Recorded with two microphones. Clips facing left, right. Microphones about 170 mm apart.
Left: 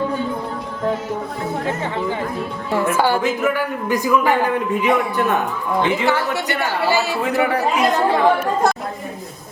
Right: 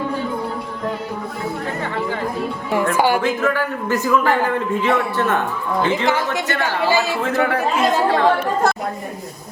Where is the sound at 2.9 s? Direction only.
15° right (ahead or behind).